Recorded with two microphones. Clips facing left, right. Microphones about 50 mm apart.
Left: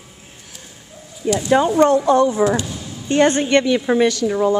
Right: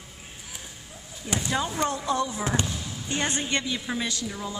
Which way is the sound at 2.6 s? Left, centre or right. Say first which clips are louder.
Left 3 dB; centre.